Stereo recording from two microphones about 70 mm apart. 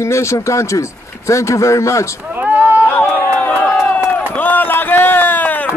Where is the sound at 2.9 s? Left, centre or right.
Left.